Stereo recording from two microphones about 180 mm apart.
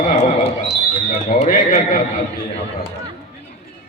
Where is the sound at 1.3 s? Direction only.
45° left (ahead or behind).